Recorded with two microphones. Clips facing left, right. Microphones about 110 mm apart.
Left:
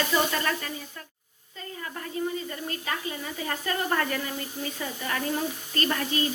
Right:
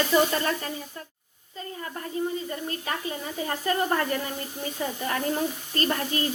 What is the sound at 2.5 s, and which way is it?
Speech, 35° right (ahead or behind).